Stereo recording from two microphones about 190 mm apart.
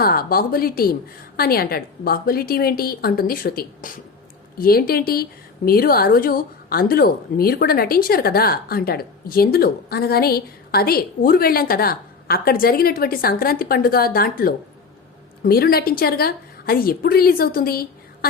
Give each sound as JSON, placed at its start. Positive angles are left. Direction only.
{"t": 0.0, "sound": "a woman's voice", "side_deg": 50}